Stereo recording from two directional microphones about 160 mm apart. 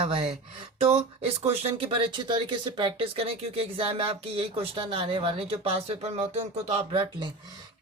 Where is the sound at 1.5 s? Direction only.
35° right (ahead or behind).